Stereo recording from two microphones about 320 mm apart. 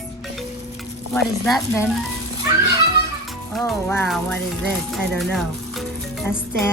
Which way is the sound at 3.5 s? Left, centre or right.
Centre.